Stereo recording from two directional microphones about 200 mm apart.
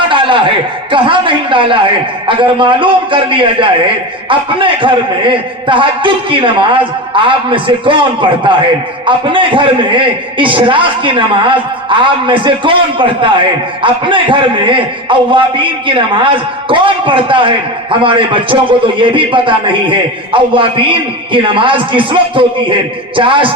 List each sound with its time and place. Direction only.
0.9 s a man's voice: 25° right (ahead or behind)